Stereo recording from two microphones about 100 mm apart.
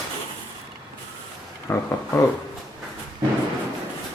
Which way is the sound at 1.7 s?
25° left (ahead or behind).